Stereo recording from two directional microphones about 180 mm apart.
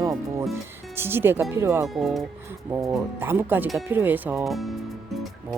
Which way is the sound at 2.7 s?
15° right (ahead or behind).